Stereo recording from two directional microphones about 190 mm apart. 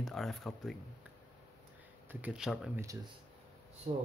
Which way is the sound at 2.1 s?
5° right (ahead or behind).